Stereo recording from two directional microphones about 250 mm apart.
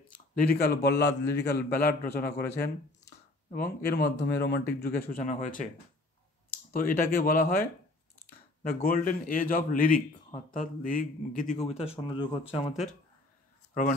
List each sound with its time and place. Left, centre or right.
0.1 s a sound: left
0.8 s speech: left
6.7 s speech: left